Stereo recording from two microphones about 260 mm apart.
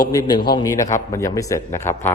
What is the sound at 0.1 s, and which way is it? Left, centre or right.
A man's voice, centre.